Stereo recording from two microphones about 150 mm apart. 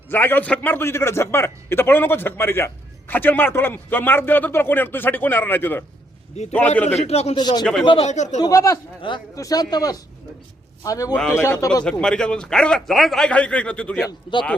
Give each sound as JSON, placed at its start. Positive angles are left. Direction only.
{"t": 0.1, "sound": "a man's voice", "side_deg": 15}
{"t": 6.4, "sound": "a man's voice", "side_deg": 45}
{"t": 7.3, "sound": "speech", "side_deg": 30}
{"t": 7.6, "sound": "a man's voice", "side_deg": 5}
{"t": 8.0, "sound": "a man's voice", "side_deg": 50}
{"t": 8.4, "sound": "speech", "side_deg": 20}
{"t": 9.0, "sound": "speech", "side_deg": 30}
{"t": 11.1, "sound": "a man's voice", "side_deg": 10}
{"t": 11.9, "sound": "a man's voice", "side_deg": 5}
{"t": 14.1, "sound": "a man's voice", "side_deg": 30}